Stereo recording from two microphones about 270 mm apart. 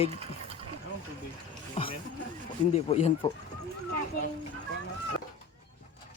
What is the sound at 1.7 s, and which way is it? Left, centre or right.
Music, centre.